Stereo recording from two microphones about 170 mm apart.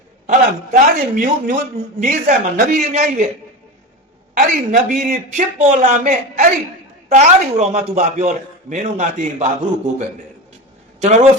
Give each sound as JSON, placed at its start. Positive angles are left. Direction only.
{"t": 0.3, "sound": "speech", "side_deg": -45}
{"t": 4.4, "sound": "speech", "side_deg": -55}
{"t": 11.0, "sound": "a man's voice", "side_deg": -45}